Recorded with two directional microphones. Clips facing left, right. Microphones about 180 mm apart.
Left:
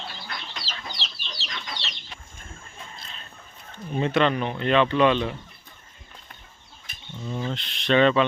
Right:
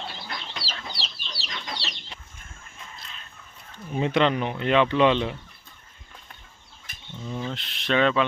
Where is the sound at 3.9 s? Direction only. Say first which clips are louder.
Even; 15° right (ahead or behind).